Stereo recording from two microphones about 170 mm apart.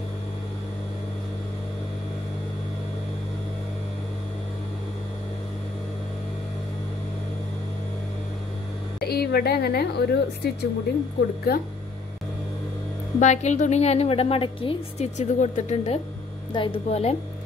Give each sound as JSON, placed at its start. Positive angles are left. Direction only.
{"t": 9.0, "sound": "a woman's voice", "side_deg": 65}
{"t": 13.2, "sound": "a woman's voice", "side_deg": 45}